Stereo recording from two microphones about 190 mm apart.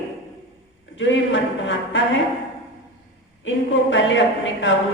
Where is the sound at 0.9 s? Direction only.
80° left.